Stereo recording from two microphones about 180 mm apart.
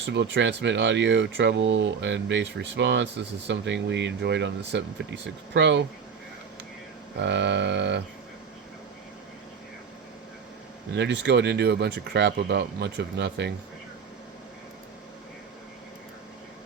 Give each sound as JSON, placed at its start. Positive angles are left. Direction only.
{"t": 0.0, "sound": "speech", "side_deg": -75}
{"t": 7.2, "sound": "speech", "side_deg": -75}
{"t": 10.9, "sound": "speech", "side_deg": -75}